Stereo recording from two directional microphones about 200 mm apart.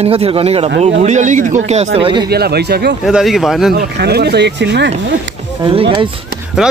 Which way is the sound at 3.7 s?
50° right (ahead or behind).